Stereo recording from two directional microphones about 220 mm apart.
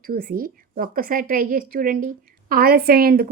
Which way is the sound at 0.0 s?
40° right (ahead or behind).